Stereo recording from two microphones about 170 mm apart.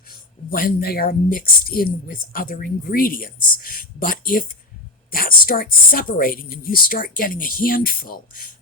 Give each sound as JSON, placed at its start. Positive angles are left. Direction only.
{"t": 0.5, "sound": "speech", "side_deg": 60}